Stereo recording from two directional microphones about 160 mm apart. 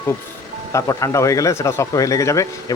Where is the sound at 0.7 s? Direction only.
20° left (ahead or behind).